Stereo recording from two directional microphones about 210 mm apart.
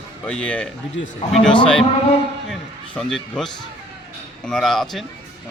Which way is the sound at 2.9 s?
Centre (ahead or behind).